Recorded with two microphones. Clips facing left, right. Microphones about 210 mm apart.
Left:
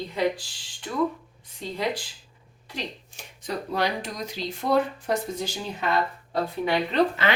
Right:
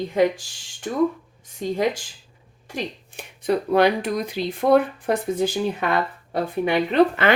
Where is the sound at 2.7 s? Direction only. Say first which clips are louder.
Right 5 dB; 60° right (ahead or behind).